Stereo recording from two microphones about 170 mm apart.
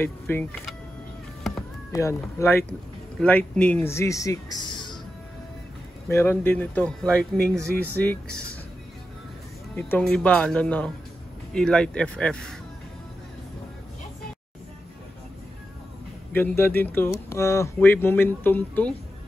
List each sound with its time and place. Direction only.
0.0 s speech: 10° left (ahead or behind)
1.9 s speech: 15° left (ahead or behind)
6.0 s speech: 15° left (ahead or behind)
9.8 s speech: 10° left (ahead or behind)
16.3 s speech: 15° left (ahead or behind)